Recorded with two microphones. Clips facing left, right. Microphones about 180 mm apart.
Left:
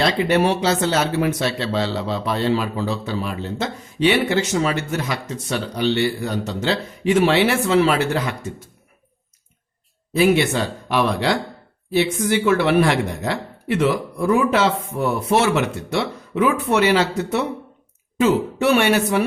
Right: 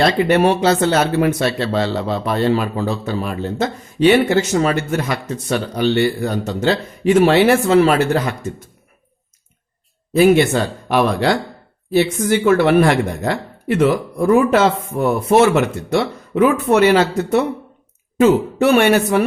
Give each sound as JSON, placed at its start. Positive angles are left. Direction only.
{"t": 0.0, "sound": "speech", "side_deg": -55}
{"t": 10.2, "sound": "speech", "side_deg": -50}